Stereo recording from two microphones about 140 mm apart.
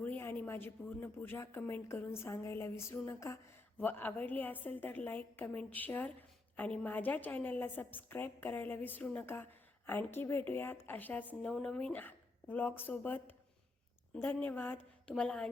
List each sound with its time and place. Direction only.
0.0 s a woman's voice: 15° left (ahead or behind)